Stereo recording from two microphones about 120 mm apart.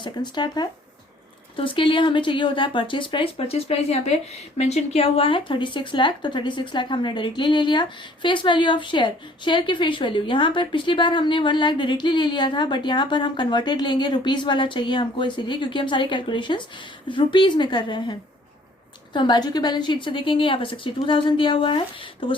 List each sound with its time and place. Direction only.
0.0 s a woman's voice: 35° left (ahead or behind)